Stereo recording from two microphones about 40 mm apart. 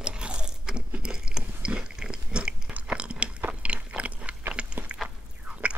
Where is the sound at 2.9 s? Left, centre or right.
Right.